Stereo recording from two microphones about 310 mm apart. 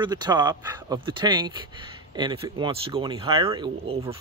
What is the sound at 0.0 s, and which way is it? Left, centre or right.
Speech, centre.